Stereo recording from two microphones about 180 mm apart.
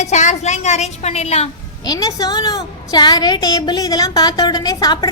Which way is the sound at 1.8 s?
20° left (ahead or behind).